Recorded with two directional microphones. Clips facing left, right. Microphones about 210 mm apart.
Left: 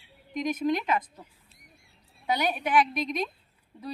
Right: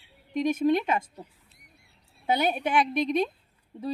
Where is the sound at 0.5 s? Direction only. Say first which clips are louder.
Right 2 dB; 25° right (ahead or behind).